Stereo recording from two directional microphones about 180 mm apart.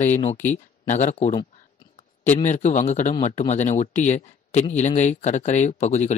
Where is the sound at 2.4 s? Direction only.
40° left (ahead or behind).